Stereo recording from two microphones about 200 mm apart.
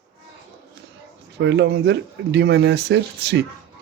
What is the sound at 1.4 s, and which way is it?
Speech, 60° right (ahead or behind).